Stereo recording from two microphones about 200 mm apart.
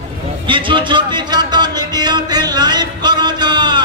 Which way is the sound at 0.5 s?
25° right (ahead or behind).